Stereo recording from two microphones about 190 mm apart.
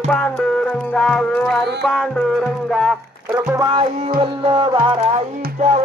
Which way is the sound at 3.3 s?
15° right (ahead or behind).